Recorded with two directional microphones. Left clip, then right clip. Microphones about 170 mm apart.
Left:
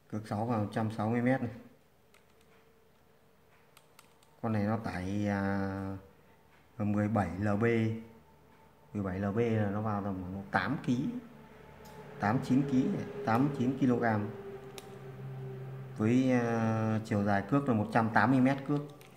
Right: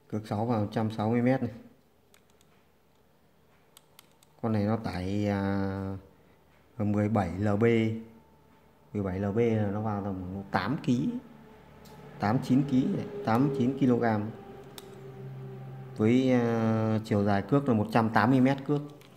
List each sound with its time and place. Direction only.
0.1 s speech: 30° right (ahead or behind)
4.4 s speech: 30° right (ahead or behind)
8.9 s a man's voice: 30° right (ahead or behind)
12.2 s speech: 30° right (ahead or behind)
15.9 s speech: 35° right (ahead or behind)